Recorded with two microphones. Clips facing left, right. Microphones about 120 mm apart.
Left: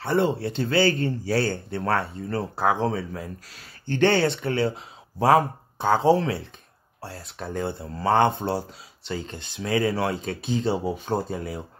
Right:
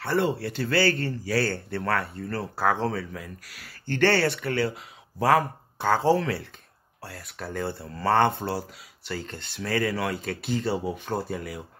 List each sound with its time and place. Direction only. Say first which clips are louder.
0.0 s speech: left 2 dB; 20° left (ahead or behind)
3.1 s speech: left 4 dB; 30° left (ahead or behind)